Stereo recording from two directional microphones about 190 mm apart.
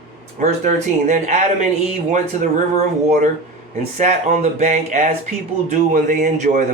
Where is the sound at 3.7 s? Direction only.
35° right (ahead or behind).